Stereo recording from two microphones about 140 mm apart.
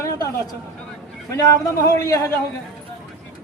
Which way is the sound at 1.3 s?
20° left (ahead or behind).